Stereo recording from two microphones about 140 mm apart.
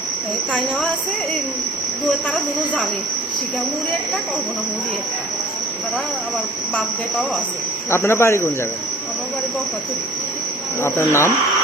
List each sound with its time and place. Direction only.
7.9 s speech: 20° left (ahead or behind)
10.8 s speech: 20° left (ahead or behind)